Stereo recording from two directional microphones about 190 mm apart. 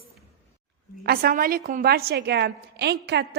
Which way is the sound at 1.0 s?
55° right (ahead or behind).